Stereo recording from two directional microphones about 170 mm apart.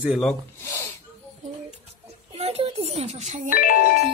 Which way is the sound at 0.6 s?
15° left (ahead or behind).